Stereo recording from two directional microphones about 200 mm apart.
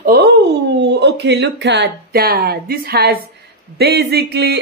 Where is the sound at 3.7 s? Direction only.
50° right (ahead or behind).